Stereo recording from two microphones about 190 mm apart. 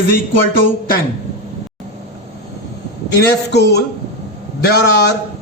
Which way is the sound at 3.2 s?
60° left (ahead or behind).